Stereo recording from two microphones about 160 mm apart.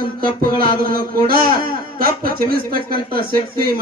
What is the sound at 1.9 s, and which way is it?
Speech, 65° right (ahead or behind).